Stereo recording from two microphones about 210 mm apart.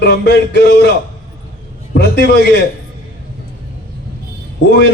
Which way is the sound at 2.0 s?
55° left (ahead or behind).